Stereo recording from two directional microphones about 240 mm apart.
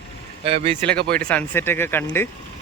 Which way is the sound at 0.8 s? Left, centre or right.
Centre.